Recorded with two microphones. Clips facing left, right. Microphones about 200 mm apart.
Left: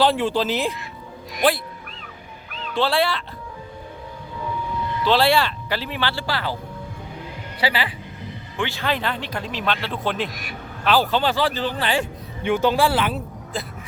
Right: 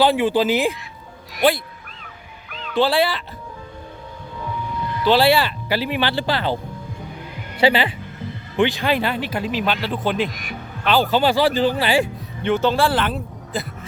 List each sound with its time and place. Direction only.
0.0 s speech: 5° right (ahead or behind)
2.7 s speech: centre (ahead or behind)
5.0 s speech: 5° right (ahead or behind)
11.2 s speech: 10° right (ahead or behind)
12.4 s speech: 10° left (ahead or behind)